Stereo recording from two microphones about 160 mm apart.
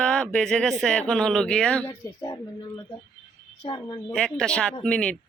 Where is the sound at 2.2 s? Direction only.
20° left (ahead or behind).